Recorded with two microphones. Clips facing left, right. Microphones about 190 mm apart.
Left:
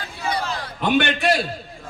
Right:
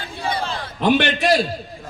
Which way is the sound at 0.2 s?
25° right (ahead or behind).